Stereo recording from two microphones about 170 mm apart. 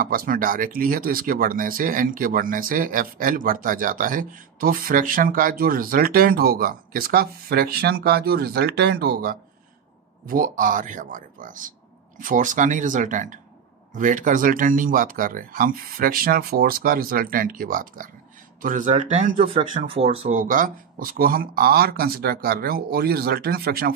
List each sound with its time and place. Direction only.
0.0 s speech: 60° right (ahead or behind); by 20.3 s 35° right (ahead or behind)
20.3 s speech: 55° right (ahead or behind)